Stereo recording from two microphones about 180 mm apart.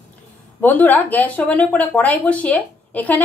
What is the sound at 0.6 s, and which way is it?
A woman's voice, 10° left (ahead or behind).